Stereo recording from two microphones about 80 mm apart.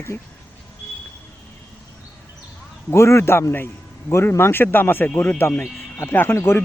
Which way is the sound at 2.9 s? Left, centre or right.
Left.